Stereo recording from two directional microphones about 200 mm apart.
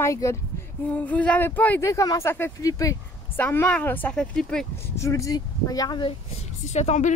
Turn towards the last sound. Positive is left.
turn(degrees=35)  # may be behind; listen again after turning